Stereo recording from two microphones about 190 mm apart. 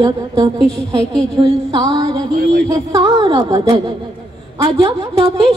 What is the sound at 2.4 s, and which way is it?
Speech, 60° right (ahead or behind).